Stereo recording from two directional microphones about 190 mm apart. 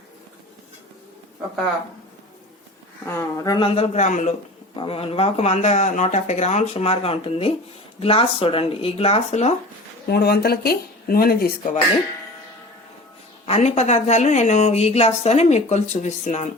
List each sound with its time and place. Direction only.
3.2 s a man's voice: 15° left (ahead or behind); by 9.6 s 35° left (ahead or behind)
10.1 s speech: 55° left (ahead or behind)
13.4 s a man's voice: 35° left (ahead or behind)